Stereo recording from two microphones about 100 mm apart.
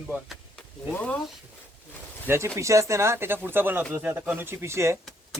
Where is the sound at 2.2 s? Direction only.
25° right (ahead or behind).